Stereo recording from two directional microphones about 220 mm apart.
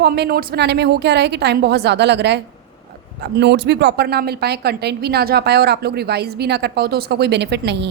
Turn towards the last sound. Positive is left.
turn(degrees=-50)  # may be behind; listen again after turning